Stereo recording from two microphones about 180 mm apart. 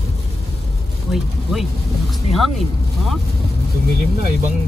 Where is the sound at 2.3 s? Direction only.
Centre (ahead or behind).